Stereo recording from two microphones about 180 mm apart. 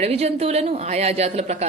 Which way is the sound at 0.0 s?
35° right (ahead or behind).